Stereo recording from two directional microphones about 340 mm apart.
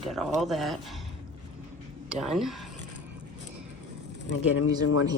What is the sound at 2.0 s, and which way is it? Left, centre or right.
Speech, centre.